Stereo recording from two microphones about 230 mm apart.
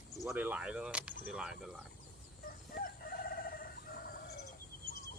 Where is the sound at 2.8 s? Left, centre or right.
Left.